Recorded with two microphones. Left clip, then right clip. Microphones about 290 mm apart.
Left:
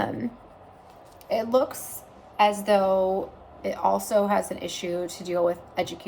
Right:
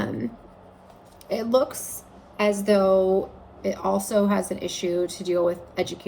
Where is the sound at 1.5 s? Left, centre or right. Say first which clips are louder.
Right 2 dB; left.